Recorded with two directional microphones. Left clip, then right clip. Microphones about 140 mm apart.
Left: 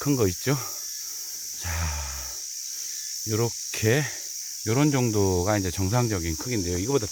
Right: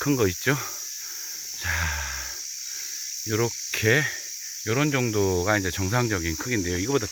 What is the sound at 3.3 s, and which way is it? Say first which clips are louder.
Speech: right 2 dB; centre (ahead or behind).